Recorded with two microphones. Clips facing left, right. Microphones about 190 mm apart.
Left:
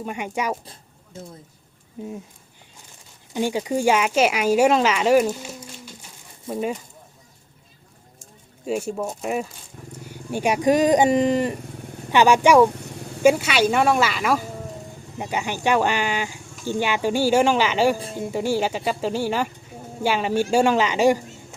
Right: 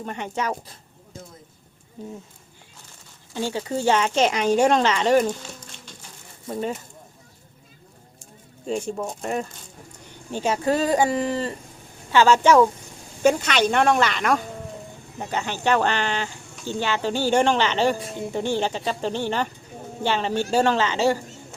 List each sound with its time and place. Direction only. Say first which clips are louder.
0.0 s speech: left 1 dB; 10° left (ahead or behind)
3.3 s speech: left 3 dB; 15° left (ahead or behind)
8.6 s speech: left 2 dB; 5° left (ahead or behind)